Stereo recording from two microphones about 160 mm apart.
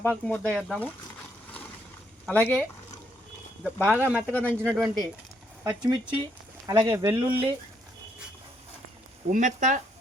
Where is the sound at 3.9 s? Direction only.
10° right (ahead or behind).